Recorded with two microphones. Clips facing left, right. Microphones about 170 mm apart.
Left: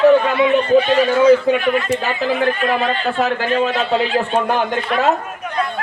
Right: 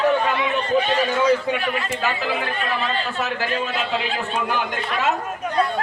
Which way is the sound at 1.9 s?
35° left (ahead or behind).